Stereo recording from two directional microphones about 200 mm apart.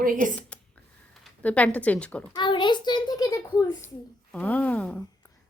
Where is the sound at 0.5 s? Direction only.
5° left (ahead or behind).